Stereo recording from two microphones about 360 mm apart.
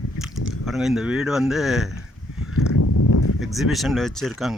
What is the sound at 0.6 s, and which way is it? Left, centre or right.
Speech, centre.